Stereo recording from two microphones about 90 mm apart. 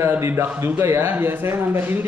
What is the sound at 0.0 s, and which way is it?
A man's voice, 25° right (ahead or behind).